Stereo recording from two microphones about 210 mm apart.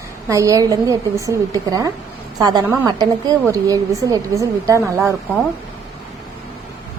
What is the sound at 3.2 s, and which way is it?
A woman's voice, 15° right (ahead or behind).